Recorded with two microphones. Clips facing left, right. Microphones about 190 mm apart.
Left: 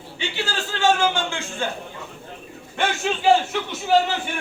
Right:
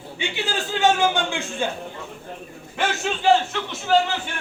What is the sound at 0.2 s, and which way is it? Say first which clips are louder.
A man's voice: right 1 dB; 15° right (ahead or behind).